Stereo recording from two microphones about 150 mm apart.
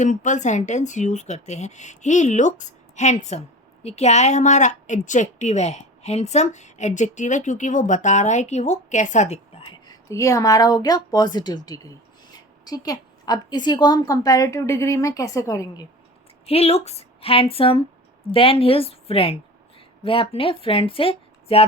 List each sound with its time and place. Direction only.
0.0 s a woman's voice: 55° left (ahead or behind); by 15.9 s 25° left (ahead or behind)
16.5 s a woman's voice: 40° left (ahead or behind)